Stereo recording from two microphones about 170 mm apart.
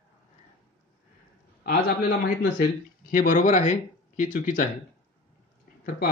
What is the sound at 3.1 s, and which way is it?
Speech, 50° left (ahead or behind).